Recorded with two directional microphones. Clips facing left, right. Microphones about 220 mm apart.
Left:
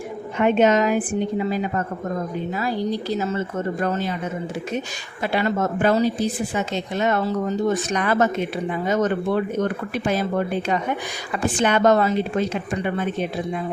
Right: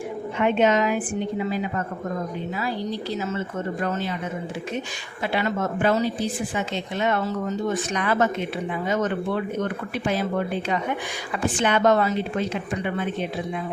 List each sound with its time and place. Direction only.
0.3 s a woman's voice: 45° left (ahead or behind)
5.3 s speech: 40° left (ahead or behind)
11.6 s speech: 40° left (ahead or behind)